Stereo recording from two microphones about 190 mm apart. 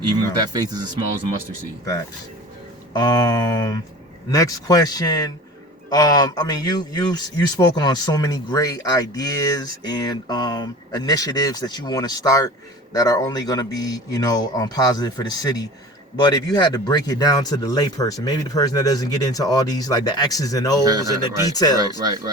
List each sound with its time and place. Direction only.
0.0 s a man's voice: 20° right (ahead or behind)
2.9 s speech: 20° left (ahead or behind)
20.8 s a man's voice: 20° right (ahead or behind)
21.5 s speech: 20° left (ahead or behind)
21.8 s a man's voice: 20° right (ahead or behind)